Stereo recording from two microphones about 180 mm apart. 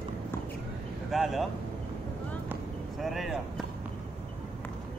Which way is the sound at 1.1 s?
Centre (ahead or behind).